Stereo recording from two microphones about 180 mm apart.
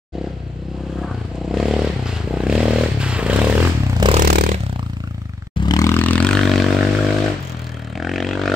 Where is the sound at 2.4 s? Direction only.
5° right (ahead or behind).